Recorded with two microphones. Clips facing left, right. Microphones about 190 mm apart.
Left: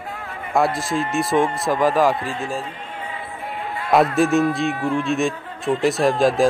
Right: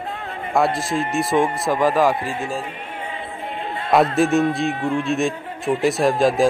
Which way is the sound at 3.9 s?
Centre (ahead or behind).